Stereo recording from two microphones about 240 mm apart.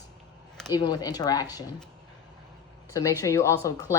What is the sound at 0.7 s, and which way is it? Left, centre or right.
Speech, centre.